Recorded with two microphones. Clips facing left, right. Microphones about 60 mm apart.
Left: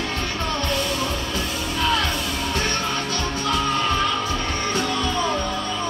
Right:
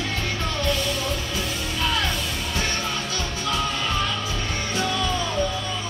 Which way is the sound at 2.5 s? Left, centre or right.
Left.